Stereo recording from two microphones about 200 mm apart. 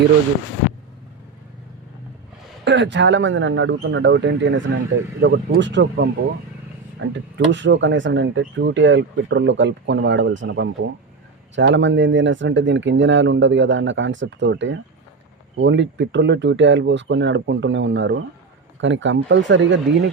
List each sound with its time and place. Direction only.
2.6 s speech: 65° right (ahead or behind)
5.2 s speech: 55° right (ahead or behind)